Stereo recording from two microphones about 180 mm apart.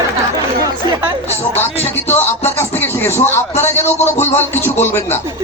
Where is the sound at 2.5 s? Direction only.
10° left (ahead or behind).